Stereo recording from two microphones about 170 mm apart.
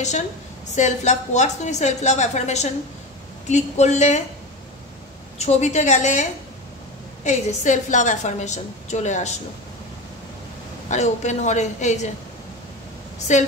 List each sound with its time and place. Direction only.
0.7 s a woman's voice: 45° left (ahead or behind)
5.4 s a woman's voice: 40° left (ahead or behind)
7.2 s a woman's voice: 45° left (ahead or behind)
10.9 s a woman's voice: 45° left (ahead or behind)